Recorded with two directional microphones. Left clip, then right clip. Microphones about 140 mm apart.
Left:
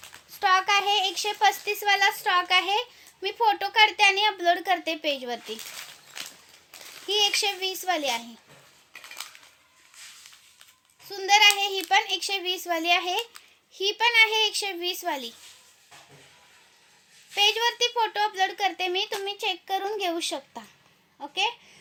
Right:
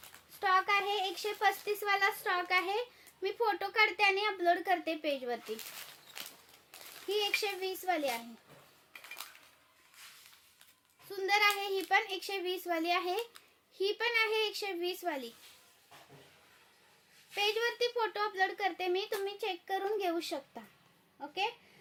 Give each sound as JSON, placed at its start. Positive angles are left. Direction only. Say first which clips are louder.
{"t": 0.3, "sound": "a child's voice", "louder": "left 8 dB", "side_deg": -10}
{"t": 6.7, "sound": "a sound", "louder": "left 7 dB", "side_deg": 50}
{"t": 7.1, "sound": "a woman's voice", "louder": "left 9 dB", "side_deg": -15}
{"t": 11.1, "sound": "a child's voice", "louder": "left 10 dB", "side_deg": -25}
{"t": 17.3, "sound": "a child's voice", "louder": "left 10 dB", "side_deg": -20}